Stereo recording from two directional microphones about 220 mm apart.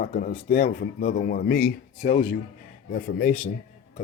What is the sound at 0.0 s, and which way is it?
A man's voice, 35° left (ahead or behind).